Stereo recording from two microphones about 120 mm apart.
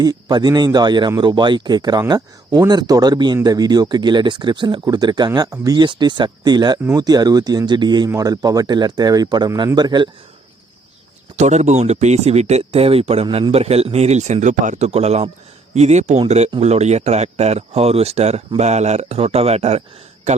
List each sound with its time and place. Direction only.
0.0 s speech: 35° right (ahead or behind)
11.3 s speech: 70° right (ahead or behind)
14.4 s speech: 90° right; by 19.8 s 60° right (ahead or behind)